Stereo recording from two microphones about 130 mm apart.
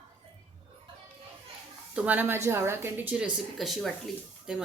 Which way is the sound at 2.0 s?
15° right (ahead or behind).